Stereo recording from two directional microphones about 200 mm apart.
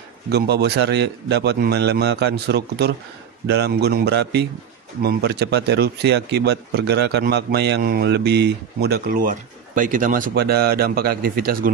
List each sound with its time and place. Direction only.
0.3 s a man's voice: 55° right (ahead or behind)